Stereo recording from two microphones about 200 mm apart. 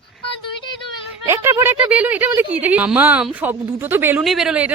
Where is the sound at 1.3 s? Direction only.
15° right (ahead or behind).